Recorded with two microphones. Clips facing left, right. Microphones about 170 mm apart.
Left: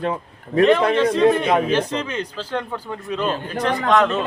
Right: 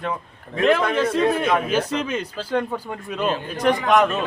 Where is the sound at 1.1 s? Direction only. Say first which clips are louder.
Left 3 dB; 5° right (ahead or behind).